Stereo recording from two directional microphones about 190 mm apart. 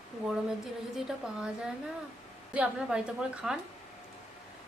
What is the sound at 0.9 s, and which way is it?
A woman's voice, 5° right (ahead or behind).